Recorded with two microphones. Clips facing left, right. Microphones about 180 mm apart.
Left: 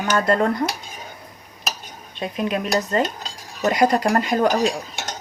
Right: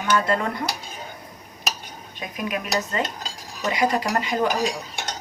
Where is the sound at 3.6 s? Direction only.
45° left (ahead or behind).